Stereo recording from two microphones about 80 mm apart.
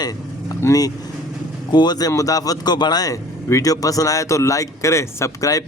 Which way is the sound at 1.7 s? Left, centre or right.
Left.